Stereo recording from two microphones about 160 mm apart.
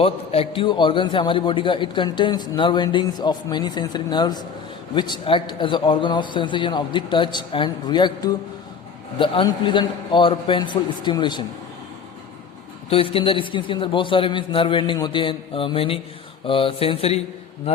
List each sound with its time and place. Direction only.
0.0 s a man's voice: 35° left (ahead or behind)
12.9 s a man's voice: 35° left (ahead or behind)